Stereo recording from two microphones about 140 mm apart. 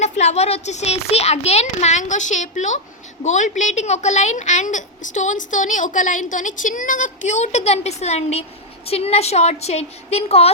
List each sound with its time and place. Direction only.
0.0 s a child's voice: 55° left (ahead or behind)